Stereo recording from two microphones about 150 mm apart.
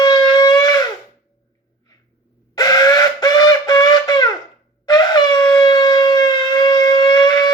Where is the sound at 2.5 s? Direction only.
25° left (ahead or behind).